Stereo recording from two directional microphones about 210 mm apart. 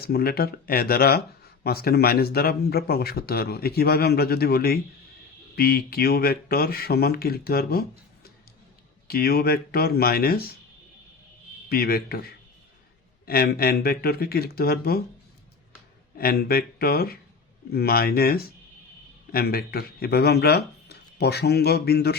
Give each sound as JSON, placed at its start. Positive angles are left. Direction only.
{"t": 0.0, "sound": "speech", "side_deg": 45}
{"t": 11.7, "sound": "speech", "side_deg": 45}
{"t": 16.1, "sound": "speech", "side_deg": 45}